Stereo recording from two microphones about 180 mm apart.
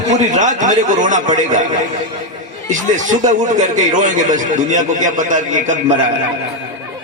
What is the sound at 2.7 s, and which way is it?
Speech, 45° right (ahead or behind).